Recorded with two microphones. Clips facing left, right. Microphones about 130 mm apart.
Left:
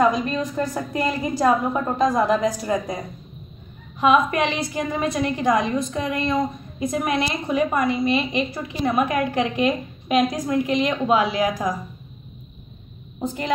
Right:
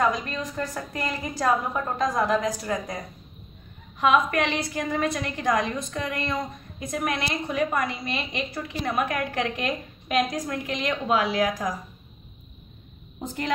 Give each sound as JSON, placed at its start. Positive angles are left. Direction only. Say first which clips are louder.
{"t": 0.6, "sound": "a woman's voice", "louder": "left 6 dB", "side_deg": 20}
{"t": 4.0, "sound": "a woman's voice", "louder": "left 3 dB", "side_deg": 20}